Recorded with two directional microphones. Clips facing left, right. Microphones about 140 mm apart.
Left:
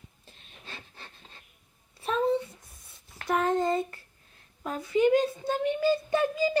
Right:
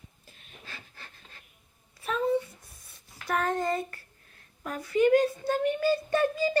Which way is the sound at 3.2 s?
20° left (ahead or behind).